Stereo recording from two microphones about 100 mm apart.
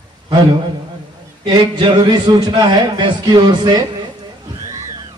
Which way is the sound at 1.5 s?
55° right (ahead or behind).